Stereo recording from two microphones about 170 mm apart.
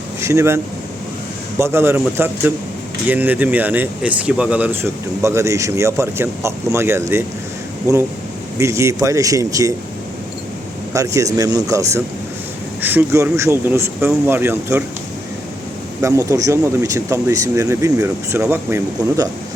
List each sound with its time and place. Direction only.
0.2 s speech: 15° right (ahead or behind)
8.5 s speech: 15° right (ahead or behind)
10.9 s speech: 20° right (ahead or behind)
16.0 s speech: 20° right (ahead or behind)